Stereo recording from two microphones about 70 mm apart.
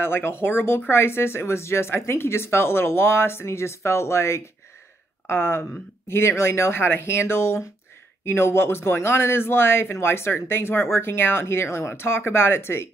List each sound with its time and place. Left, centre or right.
0.0 s speech: left